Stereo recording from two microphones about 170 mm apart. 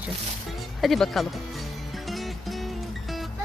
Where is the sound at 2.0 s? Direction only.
Centre (ahead or behind).